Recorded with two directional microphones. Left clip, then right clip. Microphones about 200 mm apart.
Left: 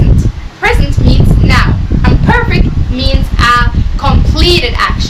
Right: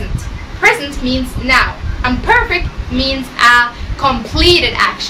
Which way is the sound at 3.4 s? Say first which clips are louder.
Right 1 dB; 10° left (ahead or behind).